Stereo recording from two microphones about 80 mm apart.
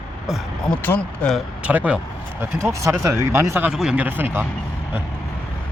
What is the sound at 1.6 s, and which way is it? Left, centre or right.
Speech, centre.